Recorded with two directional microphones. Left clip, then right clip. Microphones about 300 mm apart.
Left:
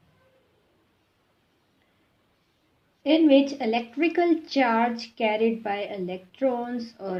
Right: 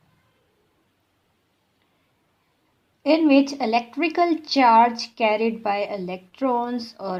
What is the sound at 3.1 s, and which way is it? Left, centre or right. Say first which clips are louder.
A woman's voice: right 1 dB; centre.